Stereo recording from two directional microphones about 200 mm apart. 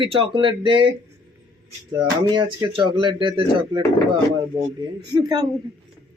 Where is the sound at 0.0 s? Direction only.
25° right (ahead or behind).